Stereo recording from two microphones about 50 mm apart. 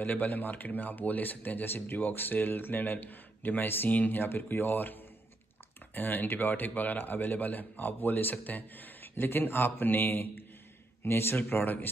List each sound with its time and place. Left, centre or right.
0.0 s speech: left
5.9 s speech: left
11.1 s speech: left
11.4 s speech: left